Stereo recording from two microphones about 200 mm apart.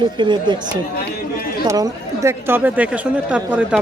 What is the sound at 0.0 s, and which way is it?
Speech, 25° right (ahead or behind).